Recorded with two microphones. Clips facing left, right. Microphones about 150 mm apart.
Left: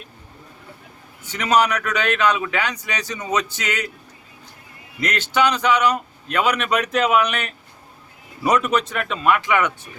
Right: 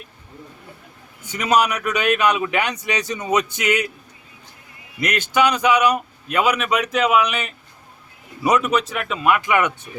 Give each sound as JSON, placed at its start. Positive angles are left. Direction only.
{"t": 1.3, "sound": "a man's voice", "side_deg": -10}
{"t": 4.9, "sound": "a man's voice", "side_deg": -15}